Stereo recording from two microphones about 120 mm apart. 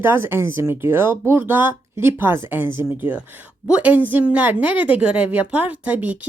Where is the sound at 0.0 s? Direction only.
20° right (ahead or behind).